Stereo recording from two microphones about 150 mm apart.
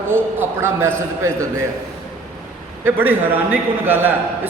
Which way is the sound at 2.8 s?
15° right (ahead or behind).